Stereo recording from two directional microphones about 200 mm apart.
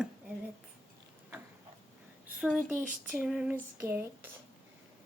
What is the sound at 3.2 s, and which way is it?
Speech, 5° right (ahead or behind).